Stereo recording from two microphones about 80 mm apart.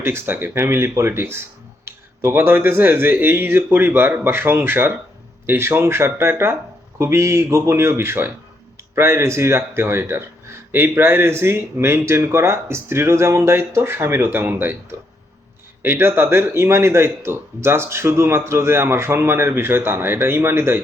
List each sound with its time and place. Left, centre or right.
0.0 s speech: right